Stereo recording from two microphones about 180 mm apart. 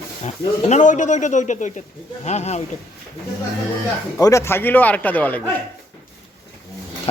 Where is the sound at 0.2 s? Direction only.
35° left (ahead or behind).